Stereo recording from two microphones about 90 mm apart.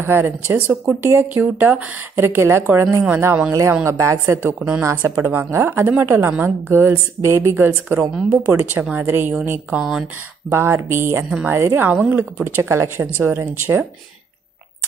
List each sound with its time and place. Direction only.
0.0 s speech: 25° right (ahead or behind)
4.6 s speech: 10° right (ahead or behind)
4.8 s speech: 30° right (ahead or behind)
8.0 s speech: 10° right (ahead or behind)
8.4 s speech: 25° right (ahead or behind)
9.8 s speech: 5° right (ahead or behind)
10.5 s speech: 25° right (ahead or behind)